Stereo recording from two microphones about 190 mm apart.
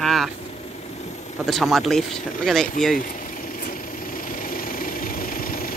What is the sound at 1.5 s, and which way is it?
Speech, centre (ahead or behind).